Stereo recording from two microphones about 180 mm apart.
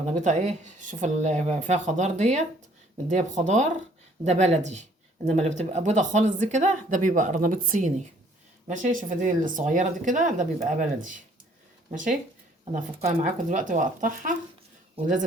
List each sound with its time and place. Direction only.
0.0 s speech: 45° right (ahead or behind)
12.7 s speech: 45° right (ahead or behind)